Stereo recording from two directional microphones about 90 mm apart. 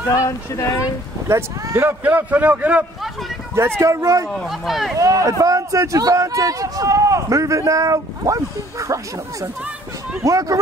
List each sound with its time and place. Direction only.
0.1 s speech: 35° left (ahead or behind)
1.3 s a man's voice: 30° right (ahead or behind)
3.8 s speech: 35° right (ahead or behind)
4.5 s speech: centre (ahead or behind)
4.9 s speech: 35° right (ahead or behind)